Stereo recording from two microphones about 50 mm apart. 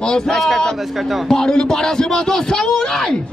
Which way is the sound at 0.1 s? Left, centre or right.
Centre.